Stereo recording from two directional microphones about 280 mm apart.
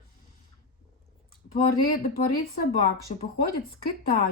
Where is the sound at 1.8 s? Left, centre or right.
Left.